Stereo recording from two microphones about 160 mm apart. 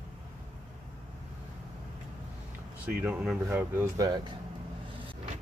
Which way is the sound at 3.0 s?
5° right (ahead or behind).